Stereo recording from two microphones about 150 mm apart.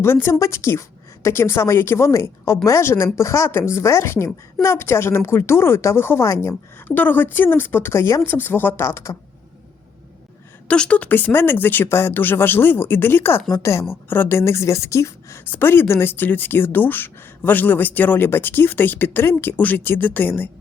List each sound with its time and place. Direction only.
0.0 s a woman's voice: 15° left (ahead or behind)
10.7 s a woman's voice: 10° left (ahead or behind)